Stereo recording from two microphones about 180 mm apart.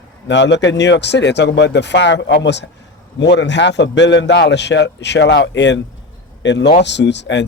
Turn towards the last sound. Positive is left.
turn(degrees=75)  # may be behind; listen again after turning